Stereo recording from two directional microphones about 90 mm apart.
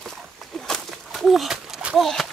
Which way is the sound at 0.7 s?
Centre (ahead or behind).